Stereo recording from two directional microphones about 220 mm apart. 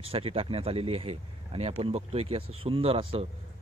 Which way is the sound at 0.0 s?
25° right (ahead or behind).